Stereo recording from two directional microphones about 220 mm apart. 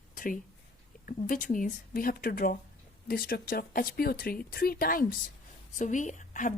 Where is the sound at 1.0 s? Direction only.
35° left (ahead or behind).